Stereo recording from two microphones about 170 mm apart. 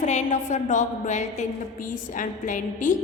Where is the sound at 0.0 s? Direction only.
45° left (ahead or behind).